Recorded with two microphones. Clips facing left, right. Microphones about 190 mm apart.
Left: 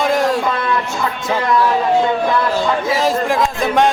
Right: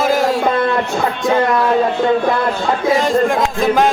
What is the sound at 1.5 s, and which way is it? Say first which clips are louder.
Speech: even; 55° right (ahead or behind).